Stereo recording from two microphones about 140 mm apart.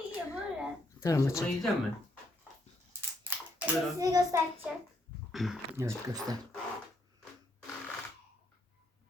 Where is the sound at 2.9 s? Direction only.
15° right (ahead or behind).